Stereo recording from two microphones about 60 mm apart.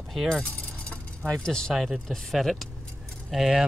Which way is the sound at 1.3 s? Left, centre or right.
Centre.